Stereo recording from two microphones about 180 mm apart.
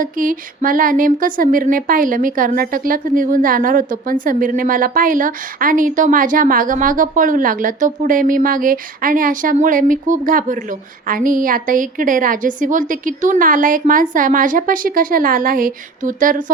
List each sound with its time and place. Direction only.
0.0 s speech: 50° right (ahead or behind)